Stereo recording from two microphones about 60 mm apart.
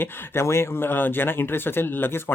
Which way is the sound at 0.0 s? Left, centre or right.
Left.